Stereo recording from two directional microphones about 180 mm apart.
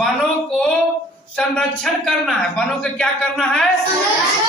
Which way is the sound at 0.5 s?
Centre (ahead or behind).